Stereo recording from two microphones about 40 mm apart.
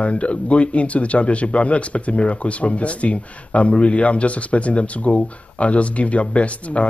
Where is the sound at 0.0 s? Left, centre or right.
Left.